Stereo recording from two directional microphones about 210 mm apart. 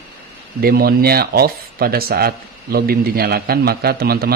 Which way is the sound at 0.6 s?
45° right (ahead or behind).